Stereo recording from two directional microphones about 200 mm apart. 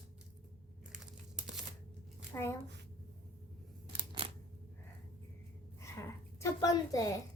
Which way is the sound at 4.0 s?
25° right (ahead or behind).